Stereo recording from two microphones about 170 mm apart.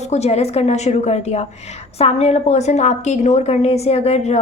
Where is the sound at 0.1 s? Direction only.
40° left (ahead or behind).